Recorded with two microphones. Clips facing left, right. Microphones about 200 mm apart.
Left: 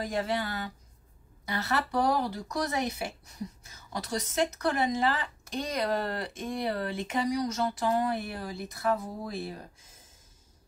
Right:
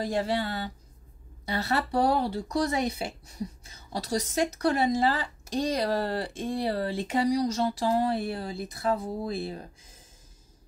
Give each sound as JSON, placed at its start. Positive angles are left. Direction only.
{"t": 0.0, "sound": "a woman's voice", "side_deg": -35}